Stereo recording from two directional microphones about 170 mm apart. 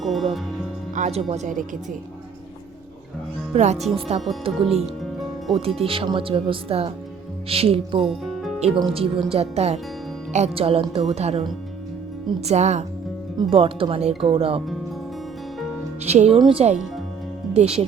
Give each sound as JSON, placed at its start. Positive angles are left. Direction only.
{"t": 0.0, "sound": "music", "side_deg": 0}
{"t": 0.9, "sound": "speech", "side_deg": -40}
{"t": 3.5, "sound": "speech", "side_deg": -40}
{"t": 8.0, "sound": "music", "side_deg": 0}
{"t": 8.5, "sound": "speech", "side_deg": -35}
{"t": 12.5, "sound": "speech", "side_deg": -40}
{"t": 13.4, "sound": "speech", "side_deg": -30}
{"t": 16.0, "sound": "speech", "side_deg": -40}